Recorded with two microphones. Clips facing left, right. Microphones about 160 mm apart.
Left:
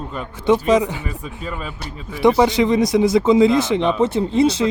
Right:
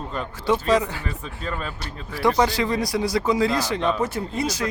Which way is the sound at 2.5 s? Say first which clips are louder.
Left 8 dB; 20° left (ahead or behind).